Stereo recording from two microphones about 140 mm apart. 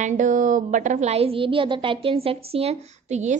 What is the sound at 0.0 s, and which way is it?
A woman's voice, 65° right (ahead or behind).